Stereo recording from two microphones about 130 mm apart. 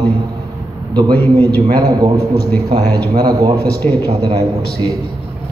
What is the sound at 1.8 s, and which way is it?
Speech, 30° right (ahead or behind).